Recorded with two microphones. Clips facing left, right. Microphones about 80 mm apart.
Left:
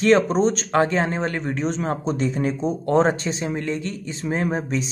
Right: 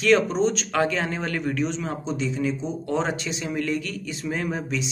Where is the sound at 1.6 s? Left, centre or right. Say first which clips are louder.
Left 4 dB; left.